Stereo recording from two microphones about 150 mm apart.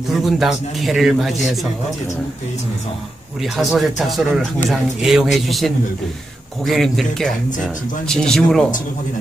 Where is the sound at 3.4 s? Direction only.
Centre (ahead or behind).